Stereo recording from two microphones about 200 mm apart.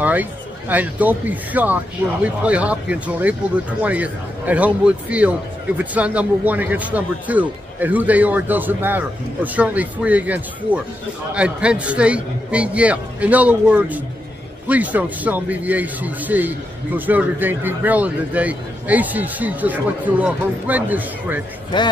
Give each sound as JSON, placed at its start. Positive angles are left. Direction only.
{"t": 0.0, "sound": "a man's voice", "side_deg": -10}
{"t": 21.7, "sound": "speech", "side_deg": 20}